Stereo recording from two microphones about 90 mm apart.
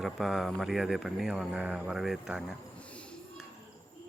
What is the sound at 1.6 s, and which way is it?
Speech, 10° right (ahead or behind).